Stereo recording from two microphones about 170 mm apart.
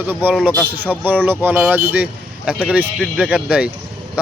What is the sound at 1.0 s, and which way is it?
Speech, 10° right (ahead or behind).